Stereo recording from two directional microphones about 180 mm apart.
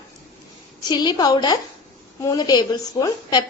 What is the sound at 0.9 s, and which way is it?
A woman's voice, 25° left (ahead or behind).